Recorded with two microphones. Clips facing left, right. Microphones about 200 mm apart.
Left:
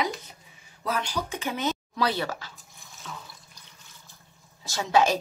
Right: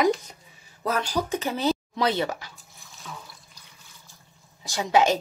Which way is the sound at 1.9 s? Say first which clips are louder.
Right 3 dB; 20° right (ahead or behind).